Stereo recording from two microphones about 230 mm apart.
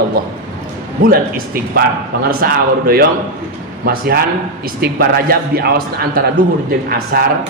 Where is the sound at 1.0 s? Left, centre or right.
Right.